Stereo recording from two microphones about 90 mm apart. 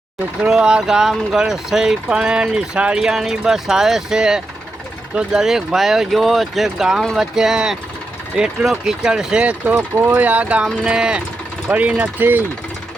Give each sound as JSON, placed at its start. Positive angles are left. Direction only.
{"t": 0.4, "sound": "speech", "side_deg": -10}